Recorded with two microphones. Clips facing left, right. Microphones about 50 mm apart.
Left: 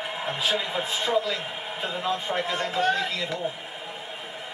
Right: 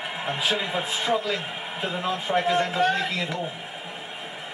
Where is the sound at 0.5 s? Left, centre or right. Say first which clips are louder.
Even; centre.